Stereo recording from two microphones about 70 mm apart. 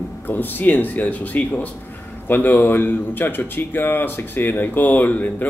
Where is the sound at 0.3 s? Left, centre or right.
Left.